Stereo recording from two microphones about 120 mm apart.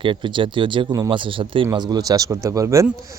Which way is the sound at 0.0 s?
45° right (ahead or behind).